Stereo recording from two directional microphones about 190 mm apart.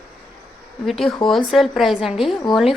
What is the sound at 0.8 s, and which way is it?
A woman's voice, centre (ahead or behind).